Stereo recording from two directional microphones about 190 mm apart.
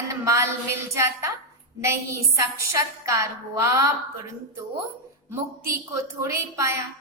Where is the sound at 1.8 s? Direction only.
15° right (ahead or behind).